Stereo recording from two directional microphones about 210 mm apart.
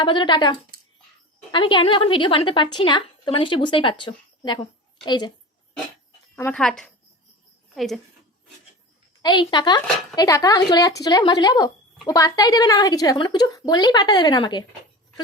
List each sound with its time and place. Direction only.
0.0 s speech: 20° left (ahead or behind)
1.5 s speech: 25° left (ahead or behind)
6.3 s a woman's voice: 5° left (ahead or behind)
9.2 s speech: 20° left (ahead or behind)